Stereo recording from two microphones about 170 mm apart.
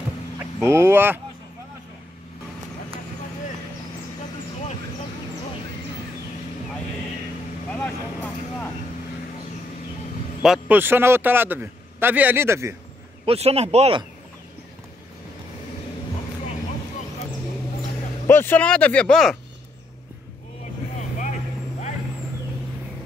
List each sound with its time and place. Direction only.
0.6 s a man's voice: 15° right (ahead or behind)
7.7 s speech: 10° left (ahead or behind)
10.4 s a man's voice: 5° right (ahead or behind)
13.2 s speech: 35° right (ahead or behind)
18.2 s speech: 15° left (ahead or behind)